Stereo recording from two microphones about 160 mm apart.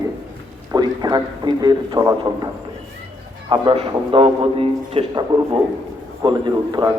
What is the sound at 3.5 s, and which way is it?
A man's voice, 35° right (ahead or behind).